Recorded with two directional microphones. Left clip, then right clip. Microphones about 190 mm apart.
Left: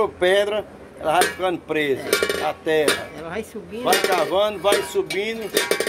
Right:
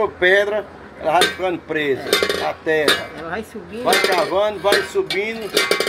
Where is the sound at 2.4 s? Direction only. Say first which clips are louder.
Right 2 dB; 15° left (ahead or behind).